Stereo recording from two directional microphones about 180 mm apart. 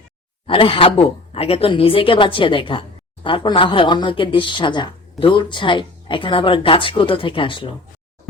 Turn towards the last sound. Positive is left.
turn(degrees=30)  # may be behind; listen again after turning